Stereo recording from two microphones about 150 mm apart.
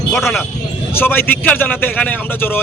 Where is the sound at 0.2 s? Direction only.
Centre (ahead or behind).